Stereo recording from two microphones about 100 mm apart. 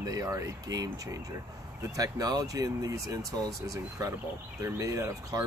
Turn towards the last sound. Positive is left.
turn(degrees=-30)  # may be behind; listen again after turning